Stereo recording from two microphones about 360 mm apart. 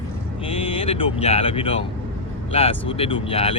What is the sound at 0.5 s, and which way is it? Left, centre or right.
Speech, centre.